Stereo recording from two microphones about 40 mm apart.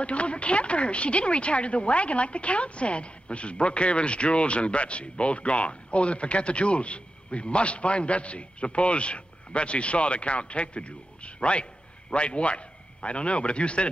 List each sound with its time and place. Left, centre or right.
0.0 s a man's voice: left